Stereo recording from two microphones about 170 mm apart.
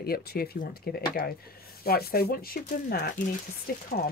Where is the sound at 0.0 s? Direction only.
65° left (ahead or behind).